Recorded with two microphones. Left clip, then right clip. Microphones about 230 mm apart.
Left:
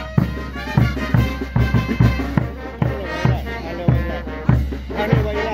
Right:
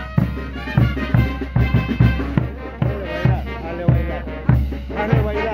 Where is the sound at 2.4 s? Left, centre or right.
Left.